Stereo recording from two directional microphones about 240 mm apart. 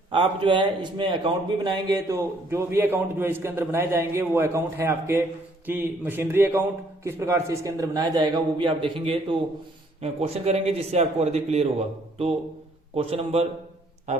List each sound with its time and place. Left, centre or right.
0.1 s a man's voice: right